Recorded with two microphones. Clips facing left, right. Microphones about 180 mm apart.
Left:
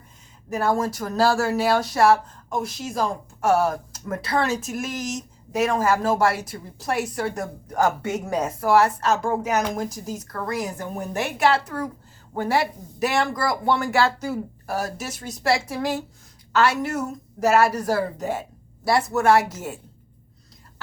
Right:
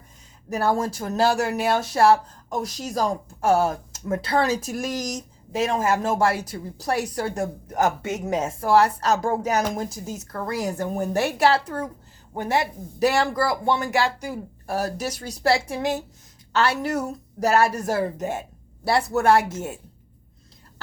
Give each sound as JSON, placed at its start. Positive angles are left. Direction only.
{"t": 0.5, "sound": "a woman's voice", "side_deg": -30}
{"t": 13.0, "sound": "speech", "side_deg": -35}
{"t": 14.7, "sound": "a woman's voice", "side_deg": -35}